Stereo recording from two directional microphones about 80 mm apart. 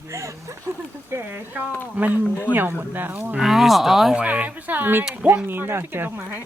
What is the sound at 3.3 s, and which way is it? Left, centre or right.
Speech, centre.